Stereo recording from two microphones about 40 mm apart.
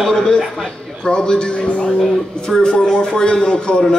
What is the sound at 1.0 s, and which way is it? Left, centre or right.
A man's voice, left.